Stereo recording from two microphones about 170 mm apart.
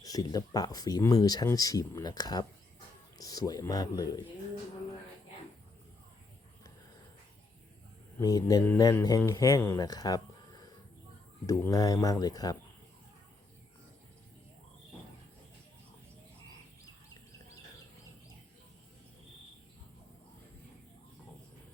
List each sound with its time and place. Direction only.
0.0 s speech: 25° left (ahead or behind)
8.2 s speech: 20° left (ahead or behind)